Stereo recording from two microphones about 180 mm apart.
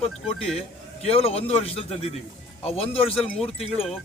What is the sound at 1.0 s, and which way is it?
A man's voice, 35° left (ahead or behind).